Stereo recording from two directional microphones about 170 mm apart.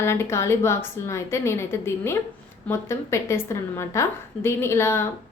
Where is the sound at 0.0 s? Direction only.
15° left (ahead or behind).